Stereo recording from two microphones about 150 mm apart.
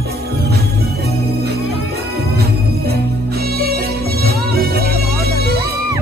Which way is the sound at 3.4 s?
90° right.